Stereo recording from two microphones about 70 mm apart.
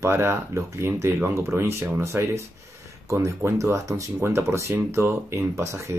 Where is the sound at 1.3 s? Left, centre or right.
Right.